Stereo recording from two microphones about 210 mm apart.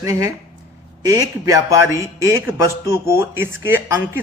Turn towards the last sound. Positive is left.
turn(degrees=-10)  # may be behind; listen again after turning